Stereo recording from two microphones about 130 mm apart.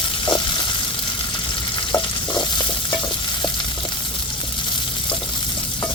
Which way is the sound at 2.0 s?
35° left (ahead or behind).